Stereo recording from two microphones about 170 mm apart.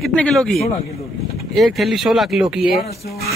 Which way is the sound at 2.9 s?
65° left (ahead or behind).